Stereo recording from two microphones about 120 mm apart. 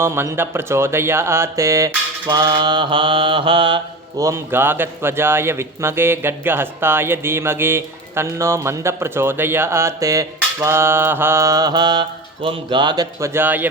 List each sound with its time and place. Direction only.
0.0 s a man's voice: 20° right (ahead or behind)
2.2 s mantra: 35° right (ahead or behind)
4.2 s a man's voice: 20° right (ahead or behind); by 13.1 s 40° right (ahead or behind)
13.1 s a man's voice: 20° right (ahead or behind)